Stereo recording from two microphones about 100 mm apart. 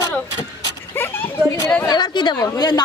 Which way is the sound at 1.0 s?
20° left (ahead or behind).